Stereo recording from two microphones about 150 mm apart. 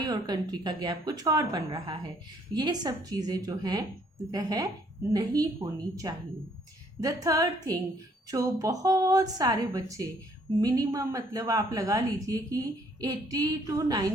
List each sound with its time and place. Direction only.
0.0 s speech: 25° right (ahead or behind)